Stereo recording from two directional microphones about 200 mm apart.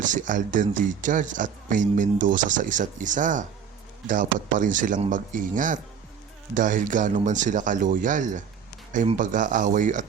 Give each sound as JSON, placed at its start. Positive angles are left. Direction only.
{"t": 0.0, "sound": "speech", "side_deg": -40}